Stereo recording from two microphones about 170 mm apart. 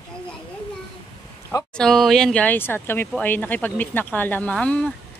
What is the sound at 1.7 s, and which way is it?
Speech, centre (ahead or behind).